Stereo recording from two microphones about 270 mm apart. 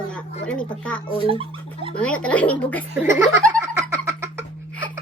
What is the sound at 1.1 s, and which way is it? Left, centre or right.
Speech, centre.